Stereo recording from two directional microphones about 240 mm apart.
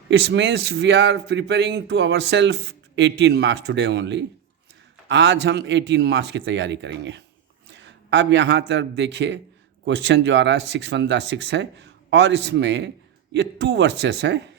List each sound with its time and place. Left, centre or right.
0.1 s a man's voice: right